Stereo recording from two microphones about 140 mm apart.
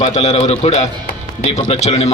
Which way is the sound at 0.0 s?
55° left (ahead or behind).